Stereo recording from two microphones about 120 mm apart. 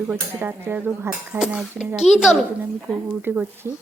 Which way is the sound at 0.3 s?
15° right (ahead or behind).